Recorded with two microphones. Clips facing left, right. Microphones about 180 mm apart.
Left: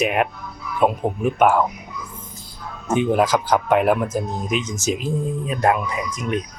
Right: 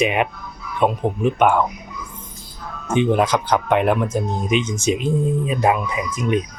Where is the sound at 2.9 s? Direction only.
5° left (ahead or behind).